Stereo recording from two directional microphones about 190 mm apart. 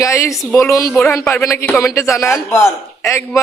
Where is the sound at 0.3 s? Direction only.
Centre (ahead or behind).